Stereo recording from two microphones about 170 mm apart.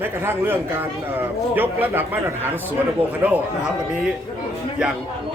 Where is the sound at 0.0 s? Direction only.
10° right (ahead or behind).